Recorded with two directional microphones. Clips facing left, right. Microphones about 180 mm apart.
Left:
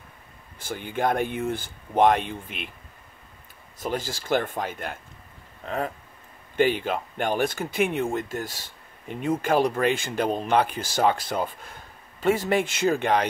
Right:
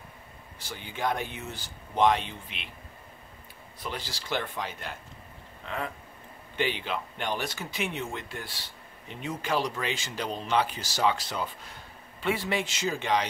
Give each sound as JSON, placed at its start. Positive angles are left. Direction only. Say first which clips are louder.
{"t": 0.6, "sound": "speech", "louder": "left 7 dB", "side_deg": 50}
{"t": 3.8, "sound": "speech", "louder": "left 8 dB", "side_deg": 45}